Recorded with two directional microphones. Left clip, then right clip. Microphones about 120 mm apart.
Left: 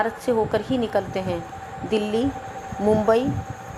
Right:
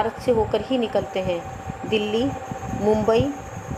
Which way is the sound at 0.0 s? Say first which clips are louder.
Right 1 dB; 50° left (ahead or behind).